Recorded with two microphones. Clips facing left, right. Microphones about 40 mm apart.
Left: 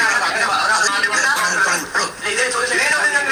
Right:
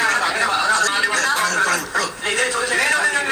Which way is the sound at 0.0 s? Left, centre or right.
Left.